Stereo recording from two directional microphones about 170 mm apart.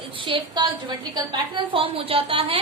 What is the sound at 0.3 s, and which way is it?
A woman's voice, 30° right (ahead or behind).